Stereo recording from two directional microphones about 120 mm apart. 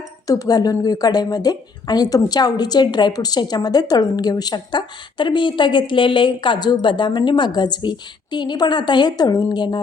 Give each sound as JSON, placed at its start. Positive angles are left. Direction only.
{"t": 0.3, "sound": "a woman's voice", "side_deg": 30}